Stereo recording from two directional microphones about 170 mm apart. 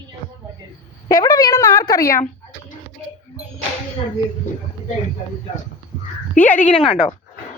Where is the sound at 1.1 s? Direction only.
20° left (ahead or behind).